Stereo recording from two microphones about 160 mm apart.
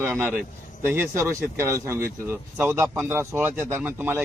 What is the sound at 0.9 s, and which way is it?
A man's voice, 15° right (ahead or behind).